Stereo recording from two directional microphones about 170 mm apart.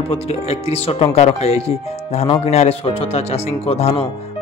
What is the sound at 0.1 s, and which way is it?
Speech, 35° left (ahead or behind).